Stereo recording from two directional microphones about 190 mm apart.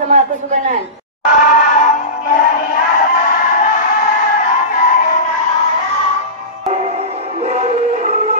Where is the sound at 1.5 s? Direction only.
40° left (ahead or behind).